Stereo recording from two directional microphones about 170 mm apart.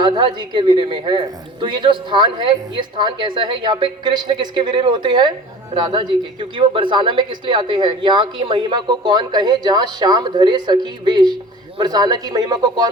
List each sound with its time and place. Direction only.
0.0 s speech: 25° right (ahead or behind)